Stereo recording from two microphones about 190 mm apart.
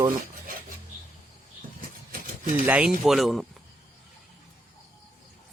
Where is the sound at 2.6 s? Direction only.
10° right (ahead or behind).